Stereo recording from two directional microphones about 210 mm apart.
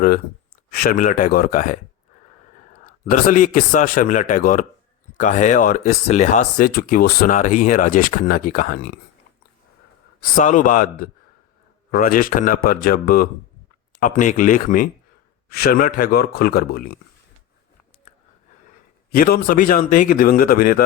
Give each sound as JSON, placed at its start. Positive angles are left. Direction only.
{"t": 0.7, "sound": "speech", "side_deg": 45}
{"t": 3.1, "sound": "speech", "side_deg": 40}
{"t": 10.3, "sound": "a man's voice", "side_deg": 40}
{"t": 19.1, "sound": "a man's voice", "side_deg": 45}